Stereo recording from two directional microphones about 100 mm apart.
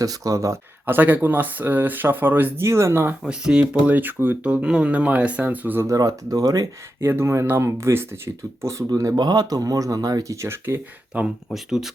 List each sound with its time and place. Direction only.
0.0 s speech: 35° right (ahead or behind)
3.2 s speech: 10° right (ahead or behind)
5.8 s speech: 35° right (ahead or behind)
7.0 s speech: 25° right (ahead or behind)
11.1 s speech: 15° right (ahead or behind)